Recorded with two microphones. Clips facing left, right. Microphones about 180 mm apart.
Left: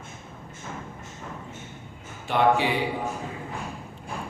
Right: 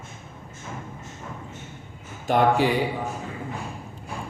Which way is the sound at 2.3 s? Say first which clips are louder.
Right 2 dB; 45° right (ahead or behind).